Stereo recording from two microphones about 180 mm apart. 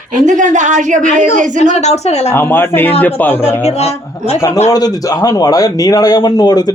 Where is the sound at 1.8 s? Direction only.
35° left (ahead or behind).